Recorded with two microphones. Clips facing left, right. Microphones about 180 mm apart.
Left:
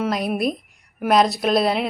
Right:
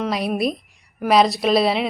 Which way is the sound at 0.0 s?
Centre (ahead or behind).